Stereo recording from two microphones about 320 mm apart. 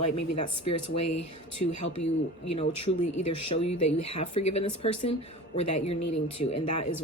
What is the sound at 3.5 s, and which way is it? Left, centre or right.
Speech, centre.